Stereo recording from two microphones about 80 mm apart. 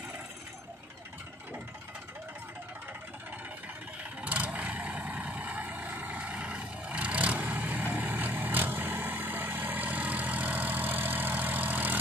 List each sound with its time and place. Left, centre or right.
4.2 s vehicle: centre